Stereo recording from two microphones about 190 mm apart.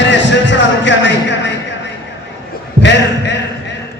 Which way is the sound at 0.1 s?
70° left (ahead or behind).